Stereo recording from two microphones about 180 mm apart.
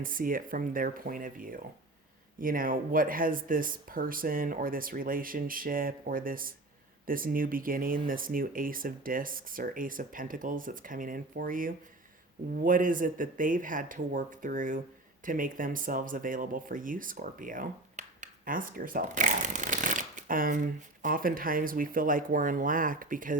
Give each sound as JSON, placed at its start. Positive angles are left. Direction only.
{"t": 0.0, "sound": "speech", "side_deg": -50}